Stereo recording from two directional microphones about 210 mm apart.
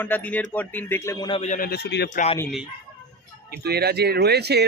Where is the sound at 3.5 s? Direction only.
50° right (ahead or behind).